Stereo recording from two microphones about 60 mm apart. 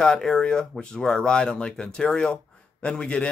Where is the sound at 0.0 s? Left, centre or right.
Centre.